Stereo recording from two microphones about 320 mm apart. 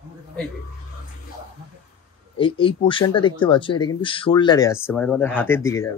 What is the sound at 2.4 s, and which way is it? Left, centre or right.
Speech, centre.